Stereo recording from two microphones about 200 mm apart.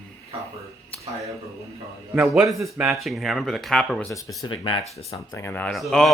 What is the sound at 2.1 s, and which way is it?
Speech, 5° right (ahead or behind).